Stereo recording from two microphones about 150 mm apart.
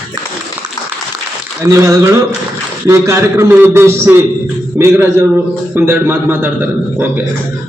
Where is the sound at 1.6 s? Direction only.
20° right (ahead or behind).